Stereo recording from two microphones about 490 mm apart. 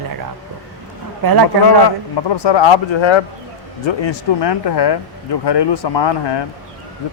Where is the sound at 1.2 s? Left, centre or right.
Right.